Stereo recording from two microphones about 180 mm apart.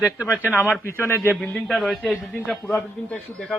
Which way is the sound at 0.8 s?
15° left (ahead or behind).